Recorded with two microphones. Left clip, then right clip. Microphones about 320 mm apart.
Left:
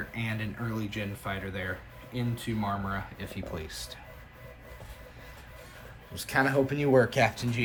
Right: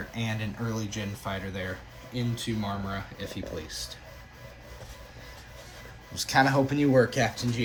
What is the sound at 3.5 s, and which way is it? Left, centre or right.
Speech, centre.